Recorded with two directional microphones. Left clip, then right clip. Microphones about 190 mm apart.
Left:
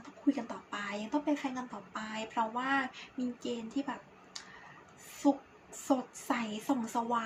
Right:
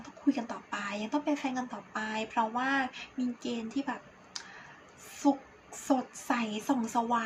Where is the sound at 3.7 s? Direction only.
15° right (ahead or behind).